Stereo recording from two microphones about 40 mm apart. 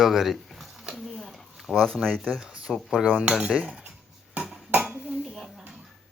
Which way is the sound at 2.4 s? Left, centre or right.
Right.